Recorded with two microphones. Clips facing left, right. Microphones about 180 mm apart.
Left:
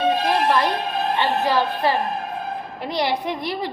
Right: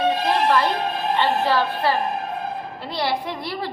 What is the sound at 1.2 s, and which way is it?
A woman's voice, 15° left (ahead or behind).